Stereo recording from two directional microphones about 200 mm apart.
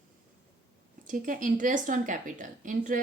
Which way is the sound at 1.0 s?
40° right (ahead or behind).